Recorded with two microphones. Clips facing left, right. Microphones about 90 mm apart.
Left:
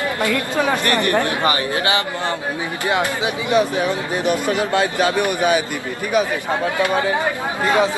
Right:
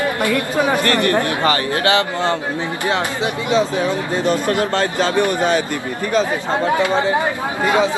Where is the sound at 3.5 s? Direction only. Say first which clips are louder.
Even; 15° left (ahead or behind).